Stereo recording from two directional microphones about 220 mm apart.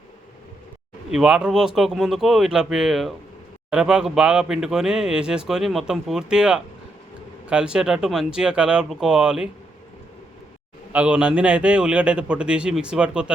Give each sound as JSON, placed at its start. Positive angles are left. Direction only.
{"t": 1.1, "sound": "speech", "side_deg": -5}
{"t": 10.9, "sound": "speech", "side_deg": -5}